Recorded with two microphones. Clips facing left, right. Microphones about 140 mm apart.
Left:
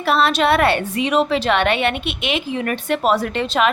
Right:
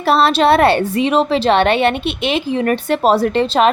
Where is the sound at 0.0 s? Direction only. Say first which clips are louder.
Right 4 dB; 30° right (ahead or behind).